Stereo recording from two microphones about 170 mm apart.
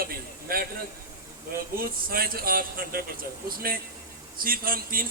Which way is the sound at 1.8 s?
60° right (ahead or behind).